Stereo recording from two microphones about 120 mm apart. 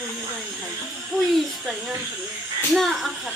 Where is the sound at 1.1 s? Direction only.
5° left (ahead or behind).